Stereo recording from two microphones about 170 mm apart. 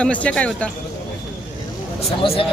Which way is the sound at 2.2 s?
35° left (ahead or behind).